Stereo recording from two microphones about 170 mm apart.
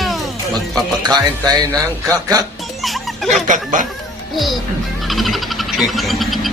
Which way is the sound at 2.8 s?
Centre (ahead or behind).